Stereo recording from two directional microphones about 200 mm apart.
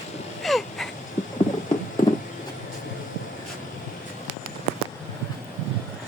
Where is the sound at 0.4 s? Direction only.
Centre (ahead or behind).